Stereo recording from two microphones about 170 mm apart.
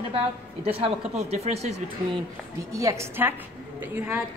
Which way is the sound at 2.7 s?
15° right (ahead or behind).